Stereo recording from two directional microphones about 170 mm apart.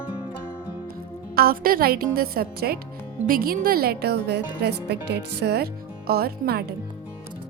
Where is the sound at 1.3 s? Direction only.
60° right (ahead or behind).